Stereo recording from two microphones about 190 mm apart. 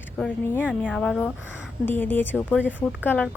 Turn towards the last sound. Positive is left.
turn(degrees=10)  # may be behind; listen again after turning